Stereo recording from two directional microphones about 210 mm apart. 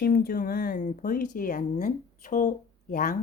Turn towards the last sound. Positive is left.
turn(degrees=40)  # may be behind; listen again after turning